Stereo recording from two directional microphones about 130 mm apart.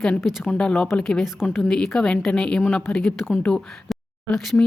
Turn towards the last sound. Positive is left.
turn(degrees=0)  # may be behind; listen again after turning